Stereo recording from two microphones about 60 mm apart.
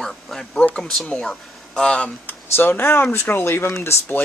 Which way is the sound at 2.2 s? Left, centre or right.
Left.